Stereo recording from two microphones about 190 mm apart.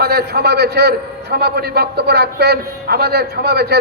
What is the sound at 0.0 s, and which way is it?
A man's voice, 55° right (ahead or behind).